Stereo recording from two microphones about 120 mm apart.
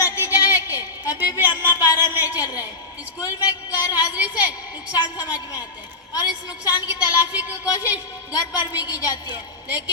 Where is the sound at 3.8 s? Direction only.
25° left (ahead or behind).